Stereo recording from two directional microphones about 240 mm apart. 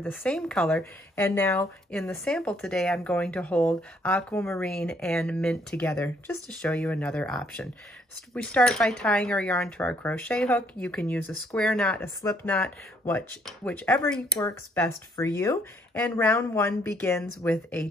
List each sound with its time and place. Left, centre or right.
0.0 s speech: centre